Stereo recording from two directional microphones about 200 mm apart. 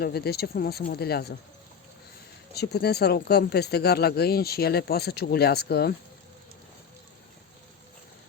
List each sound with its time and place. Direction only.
0.0 s speech: 50° left (ahead or behind)
2.6 s speech: 55° left (ahead or behind)